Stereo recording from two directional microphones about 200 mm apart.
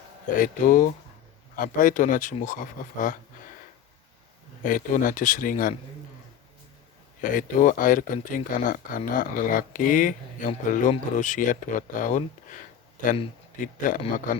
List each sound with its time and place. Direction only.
0.3 s speech: 40° left (ahead or behind)
4.6 s speech: 40° left (ahead or behind)
7.2 s speech: 40° left (ahead or behind)
13.9 s speech: 40° left (ahead or behind)